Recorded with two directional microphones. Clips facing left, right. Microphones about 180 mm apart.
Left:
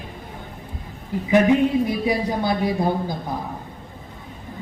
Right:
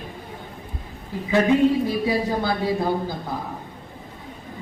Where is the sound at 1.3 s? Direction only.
15° left (ahead or behind).